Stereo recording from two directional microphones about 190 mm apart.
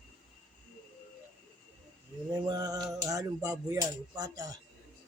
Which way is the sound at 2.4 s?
20° right (ahead or behind).